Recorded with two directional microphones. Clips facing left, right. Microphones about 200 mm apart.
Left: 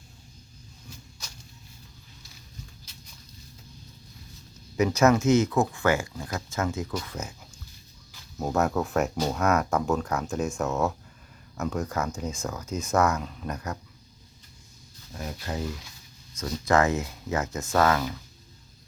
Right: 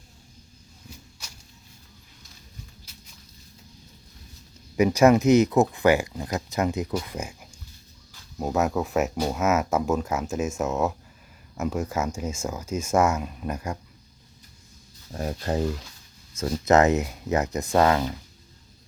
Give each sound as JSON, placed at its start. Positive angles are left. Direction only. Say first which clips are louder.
{"t": 4.8, "sound": "speech", "louder": "right 3 dB", "side_deg": -10}
{"t": 8.4, "sound": "speech", "louder": "right 1 dB", "side_deg": 0}
{"t": 11.5, "sound": "speech", "louder": "right 2 dB", "side_deg": -10}
{"t": 15.1, "sound": "speech", "louder": "right 7 dB", "side_deg": -40}
{"t": 16.4, "sound": "speech", "louder": "right 4 dB", "side_deg": -25}